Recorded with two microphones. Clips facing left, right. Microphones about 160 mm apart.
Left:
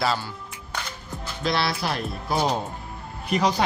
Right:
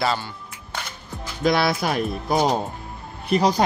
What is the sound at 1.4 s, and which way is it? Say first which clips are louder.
Speech: right 5 dB; 50° right (ahead or behind).